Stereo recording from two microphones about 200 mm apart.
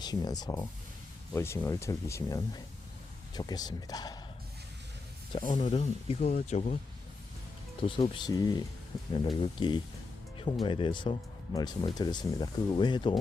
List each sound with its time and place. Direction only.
0.0 s speech: 20° left (ahead or behind)
5.5 s speech: 25° left (ahead or behind)
7.8 s speech: 25° left (ahead or behind)